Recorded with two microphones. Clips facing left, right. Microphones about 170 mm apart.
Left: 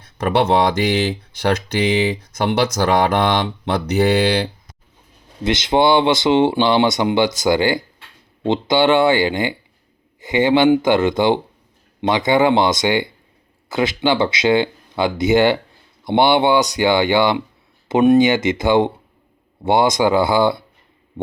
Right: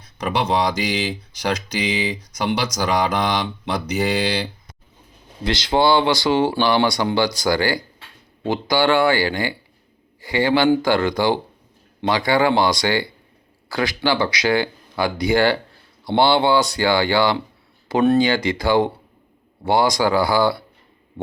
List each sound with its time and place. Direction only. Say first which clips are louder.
0.2 s speech: left 5 dB; 55° left (ahead or behind)
5.4 s speech: left 3 dB; 20° left (ahead or behind)